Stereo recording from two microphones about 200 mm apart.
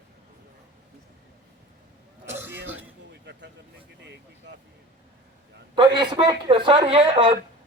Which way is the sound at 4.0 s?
55° right (ahead or behind).